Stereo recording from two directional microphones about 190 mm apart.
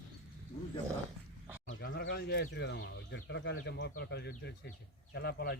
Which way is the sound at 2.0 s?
60° left (ahead or behind).